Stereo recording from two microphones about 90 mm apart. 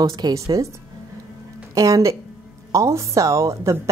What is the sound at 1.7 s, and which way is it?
A woman's voice, 35° right (ahead or behind).